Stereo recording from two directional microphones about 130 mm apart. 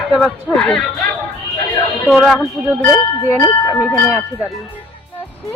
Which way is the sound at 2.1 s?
5° left (ahead or behind).